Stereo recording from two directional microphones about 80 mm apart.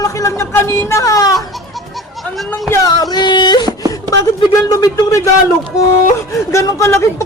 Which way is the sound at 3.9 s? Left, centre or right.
Left.